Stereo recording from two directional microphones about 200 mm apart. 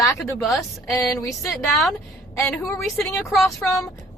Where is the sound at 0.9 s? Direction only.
15° left (ahead or behind).